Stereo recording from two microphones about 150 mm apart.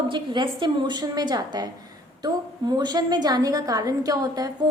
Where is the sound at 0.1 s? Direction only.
35° right (ahead or behind).